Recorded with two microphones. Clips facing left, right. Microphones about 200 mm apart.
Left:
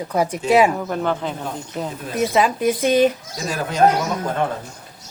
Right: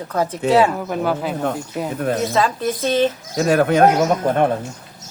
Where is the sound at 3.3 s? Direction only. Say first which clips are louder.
Right 9 dB; 60° right (ahead or behind).